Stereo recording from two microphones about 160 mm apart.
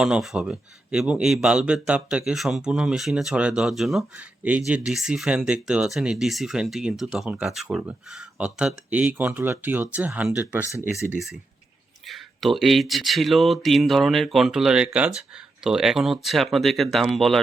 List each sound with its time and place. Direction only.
0.0 s speech: 5° right (ahead or behind)
10.7 s speech: 20° left (ahead or behind)
12.0 s speech: centre (ahead or behind)